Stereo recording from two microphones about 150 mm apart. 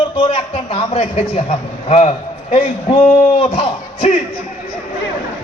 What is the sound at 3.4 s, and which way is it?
Speech, 45° left (ahead or behind).